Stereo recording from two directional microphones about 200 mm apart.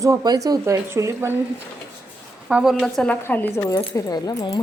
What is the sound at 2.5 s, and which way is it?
A woman's voice, 5° right (ahead or behind).